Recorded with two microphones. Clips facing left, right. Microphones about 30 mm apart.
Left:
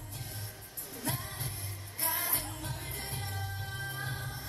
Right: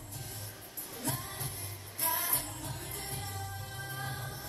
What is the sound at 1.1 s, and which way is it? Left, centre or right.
Music of asia, left.